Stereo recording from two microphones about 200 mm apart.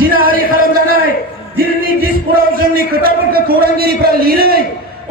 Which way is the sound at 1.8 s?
45° right (ahead or behind).